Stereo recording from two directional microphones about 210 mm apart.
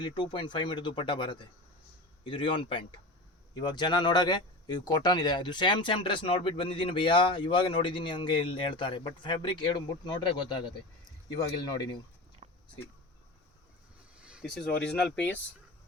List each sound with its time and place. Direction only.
0.0 s speech: 20° left (ahead or behind)
12.4 s a sound: 30° right (ahead or behind)
14.2 s speech: 5° right (ahead or behind)